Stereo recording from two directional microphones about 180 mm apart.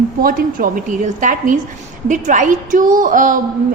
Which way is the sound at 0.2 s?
50° right (ahead or behind).